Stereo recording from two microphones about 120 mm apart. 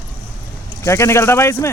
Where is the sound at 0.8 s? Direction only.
25° left (ahead or behind).